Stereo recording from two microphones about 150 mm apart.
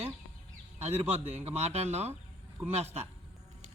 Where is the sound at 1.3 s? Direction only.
45° right (ahead or behind).